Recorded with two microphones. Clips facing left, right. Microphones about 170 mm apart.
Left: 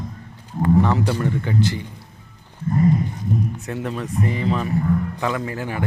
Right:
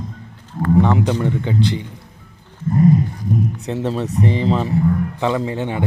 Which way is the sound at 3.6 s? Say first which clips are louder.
Right 5 dB; 30° right (ahead or behind).